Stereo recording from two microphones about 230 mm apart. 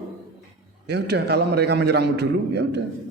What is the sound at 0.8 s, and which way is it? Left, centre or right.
A man's voice, right.